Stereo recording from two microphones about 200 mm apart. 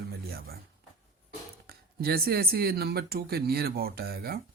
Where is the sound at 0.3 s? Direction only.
50° right (ahead or behind).